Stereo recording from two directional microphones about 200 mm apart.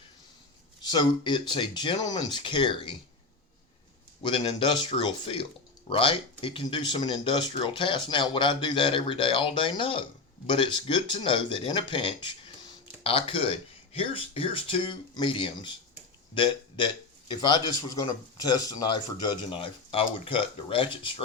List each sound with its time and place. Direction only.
0.8 s speech: 20° left (ahead or behind)
4.2 s speech: 25° left (ahead or behind)